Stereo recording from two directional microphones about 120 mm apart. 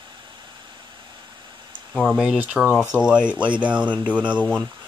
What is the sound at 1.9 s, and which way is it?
Speech, centre (ahead or behind).